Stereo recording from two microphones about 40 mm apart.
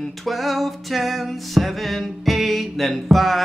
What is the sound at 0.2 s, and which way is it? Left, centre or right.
Music, centre.